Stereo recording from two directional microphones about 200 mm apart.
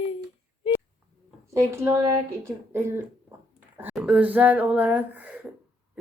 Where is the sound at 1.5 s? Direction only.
15° right (ahead or behind).